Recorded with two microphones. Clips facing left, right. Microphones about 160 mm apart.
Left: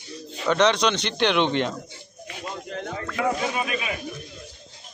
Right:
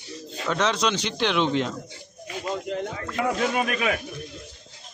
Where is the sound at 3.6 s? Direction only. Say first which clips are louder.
Right 3 dB; 50° right (ahead or behind).